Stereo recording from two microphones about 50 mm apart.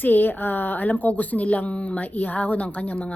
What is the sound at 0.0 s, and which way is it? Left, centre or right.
A woman's voice, left.